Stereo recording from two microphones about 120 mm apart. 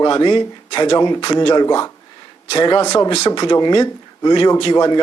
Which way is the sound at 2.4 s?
45° left (ahead or behind).